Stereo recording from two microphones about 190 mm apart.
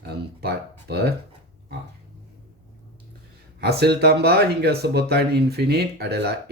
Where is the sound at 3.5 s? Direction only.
60° right (ahead or behind).